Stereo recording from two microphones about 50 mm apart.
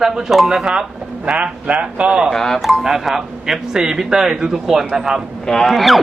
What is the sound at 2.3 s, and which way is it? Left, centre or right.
Speech, centre.